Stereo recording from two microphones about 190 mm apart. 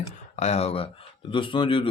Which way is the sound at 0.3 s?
35° left (ahead or behind).